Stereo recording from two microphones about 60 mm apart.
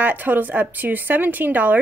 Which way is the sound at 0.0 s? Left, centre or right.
Right.